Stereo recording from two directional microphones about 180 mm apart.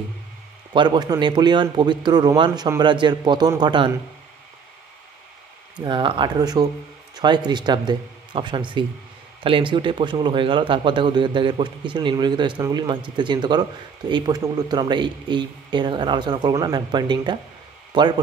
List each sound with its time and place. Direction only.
0.7 s a man's voice: 25° right (ahead or behind)
5.8 s a man's voice: 25° right (ahead or behind)